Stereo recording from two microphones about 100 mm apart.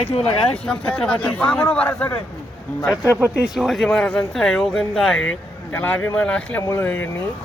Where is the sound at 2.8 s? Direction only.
30° left (ahead or behind).